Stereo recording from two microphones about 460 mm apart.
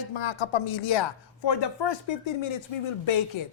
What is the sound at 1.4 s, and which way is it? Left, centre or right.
A woman's voice, left.